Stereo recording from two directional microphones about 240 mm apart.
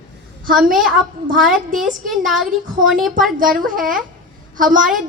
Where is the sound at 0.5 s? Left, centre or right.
Centre.